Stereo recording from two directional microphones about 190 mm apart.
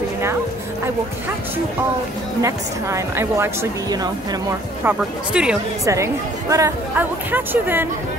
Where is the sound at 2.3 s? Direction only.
15° right (ahead or behind).